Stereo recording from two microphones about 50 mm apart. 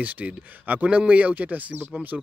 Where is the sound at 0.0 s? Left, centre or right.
Right.